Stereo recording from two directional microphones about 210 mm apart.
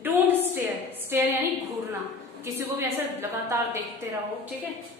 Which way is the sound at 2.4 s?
10° right (ahead or behind).